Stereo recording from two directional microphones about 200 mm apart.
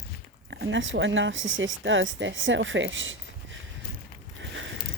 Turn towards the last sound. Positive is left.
turn(degrees=-65)  # may be behind; listen again after turning